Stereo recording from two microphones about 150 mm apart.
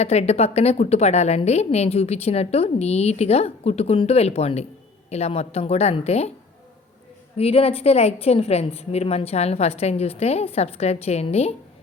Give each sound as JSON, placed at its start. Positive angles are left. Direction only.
{"t": 0.0, "sound": "a woman's voice", "side_deg": 45}
{"t": 7.3, "sound": "a woman's voice", "side_deg": 40}